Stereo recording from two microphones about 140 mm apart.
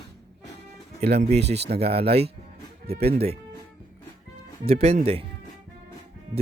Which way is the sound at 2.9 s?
45° right (ahead or behind).